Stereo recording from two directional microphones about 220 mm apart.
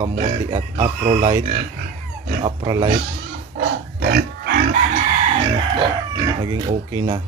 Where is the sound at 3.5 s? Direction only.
45° right (ahead or behind).